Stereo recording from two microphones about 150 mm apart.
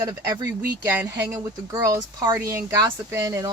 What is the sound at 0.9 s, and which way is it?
Speech, 15° right (ahead or behind).